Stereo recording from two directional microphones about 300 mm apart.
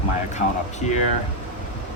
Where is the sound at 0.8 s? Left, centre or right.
Left.